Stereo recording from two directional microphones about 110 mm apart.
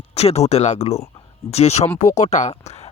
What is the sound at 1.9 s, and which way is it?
Speech, 90° left.